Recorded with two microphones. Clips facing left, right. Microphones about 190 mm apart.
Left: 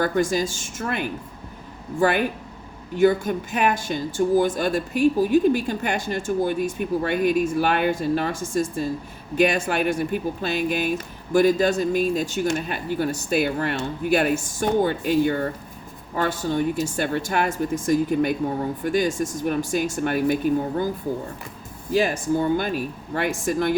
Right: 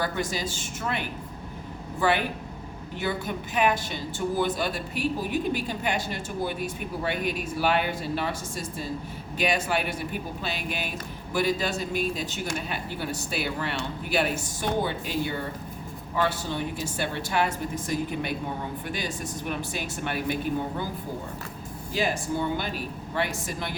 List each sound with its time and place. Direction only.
0.0 s speech: 50° left (ahead or behind)
2.0 s speech: 45° left (ahead or behind)
11.3 s speech: 50° left (ahead or behind)
21.9 s speech: 45° left (ahead or behind)